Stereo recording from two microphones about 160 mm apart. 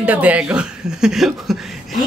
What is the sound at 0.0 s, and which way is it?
Speech, 10° right (ahead or behind).